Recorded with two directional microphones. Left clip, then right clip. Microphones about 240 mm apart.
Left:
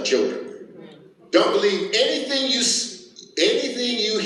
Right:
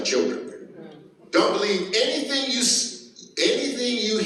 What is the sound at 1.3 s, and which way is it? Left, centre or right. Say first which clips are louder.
A man's voice: left 3 dB; centre.